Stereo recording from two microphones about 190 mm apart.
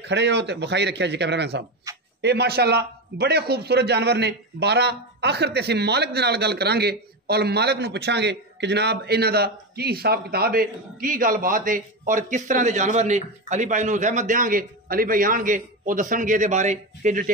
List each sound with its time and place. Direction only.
0.0 s a man's voice: 65° right (ahead or behind)
1.9 s a sound: 15° right (ahead or behind)
2.2 s a man's voice: 60° right (ahead or behind); by 17.3 s 40° right (ahead or behind)